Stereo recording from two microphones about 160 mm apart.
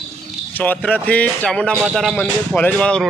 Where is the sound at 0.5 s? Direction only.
10° left (ahead or behind).